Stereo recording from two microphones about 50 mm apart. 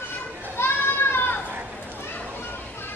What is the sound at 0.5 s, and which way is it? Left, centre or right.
Goat, left.